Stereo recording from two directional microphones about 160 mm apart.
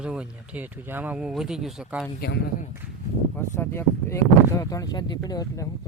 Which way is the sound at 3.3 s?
15° left (ahead or behind).